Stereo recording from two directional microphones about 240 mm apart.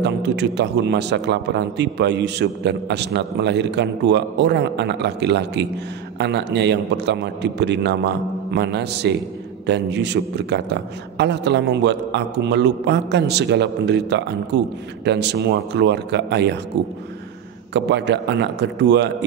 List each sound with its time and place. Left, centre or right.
0.0 s a man's voice: right